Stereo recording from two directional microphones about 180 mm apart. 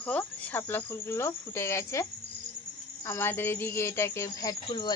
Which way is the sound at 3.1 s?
10° left (ahead or behind).